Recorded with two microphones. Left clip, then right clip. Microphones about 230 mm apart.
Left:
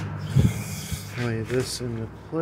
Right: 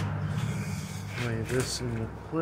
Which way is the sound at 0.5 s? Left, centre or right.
Left.